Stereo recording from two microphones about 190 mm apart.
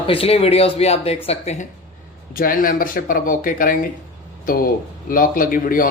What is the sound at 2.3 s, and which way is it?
Speech, 50° left (ahead or behind).